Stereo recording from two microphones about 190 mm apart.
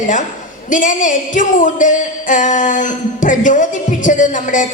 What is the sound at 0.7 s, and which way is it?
A woman's voice, 45° left (ahead or behind).